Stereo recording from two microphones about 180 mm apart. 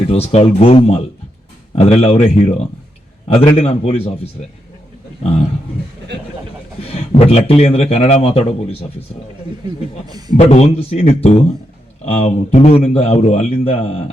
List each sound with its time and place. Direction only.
0.1 s a man's voice: 35° left (ahead or behind)
6.1 s speech: 70° right (ahead or behind)
6.8 s a man's voice: 35° left (ahead or behind)
10.1 s a man's voice: 20° right (ahead or behind)
10.3 s a man's voice: 35° left (ahead or behind)